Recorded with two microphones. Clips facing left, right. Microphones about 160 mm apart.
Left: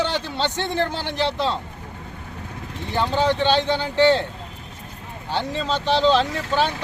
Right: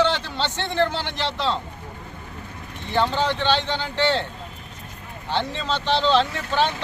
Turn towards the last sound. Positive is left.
turn(degrees=10)  # may be behind; listen again after turning